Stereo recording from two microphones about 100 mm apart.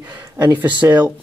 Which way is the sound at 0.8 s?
15° right (ahead or behind).